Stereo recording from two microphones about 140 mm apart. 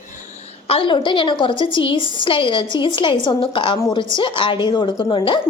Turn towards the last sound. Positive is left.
turn(degrees=35)  # may be behind; listen again after turning